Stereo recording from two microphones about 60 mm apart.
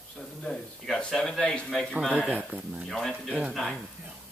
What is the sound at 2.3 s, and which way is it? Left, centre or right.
Speech, centre.